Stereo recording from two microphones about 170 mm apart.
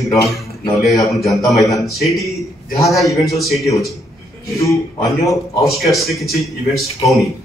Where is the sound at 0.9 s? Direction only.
20° left (ahead or behind).